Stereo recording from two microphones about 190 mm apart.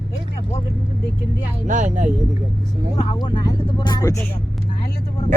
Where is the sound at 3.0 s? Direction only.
25° left (ahead or behind).